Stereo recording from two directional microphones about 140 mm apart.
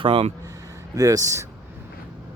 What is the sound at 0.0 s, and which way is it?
Speech, 40° right (ahead or behind).